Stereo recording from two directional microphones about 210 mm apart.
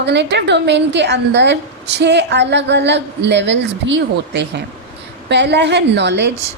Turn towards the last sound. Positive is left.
turn(degrees=-55)  # may be behind; listen again after turning